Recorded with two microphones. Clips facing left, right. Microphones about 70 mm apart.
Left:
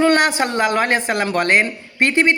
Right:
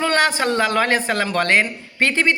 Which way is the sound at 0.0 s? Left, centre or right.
Left.